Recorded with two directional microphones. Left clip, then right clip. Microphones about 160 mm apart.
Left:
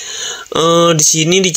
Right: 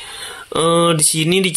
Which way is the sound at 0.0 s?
20° left (ahead or behind).